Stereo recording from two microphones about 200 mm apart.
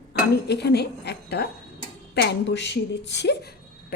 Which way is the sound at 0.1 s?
55° left (ahead or behind).